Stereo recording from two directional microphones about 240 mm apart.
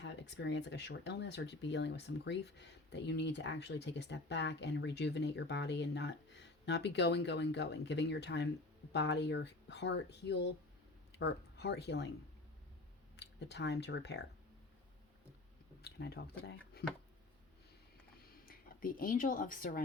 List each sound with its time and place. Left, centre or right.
0.0 s speech: left
13.1 s speech: left
15.8 s speech: left
16.8 s a sound: left
18.3 s speech: left